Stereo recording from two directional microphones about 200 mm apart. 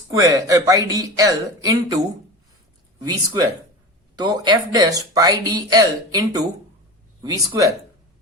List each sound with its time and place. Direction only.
0.1 s speech: 15° right (ahead or behind)